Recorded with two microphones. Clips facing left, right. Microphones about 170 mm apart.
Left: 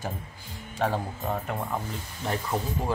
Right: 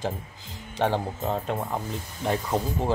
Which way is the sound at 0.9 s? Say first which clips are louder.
Right 3 dB; 25° right (ahead or behind).